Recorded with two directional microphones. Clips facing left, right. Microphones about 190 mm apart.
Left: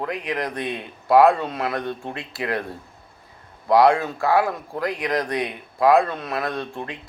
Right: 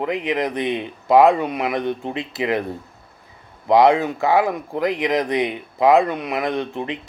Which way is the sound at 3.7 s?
20° right (ahead or behind).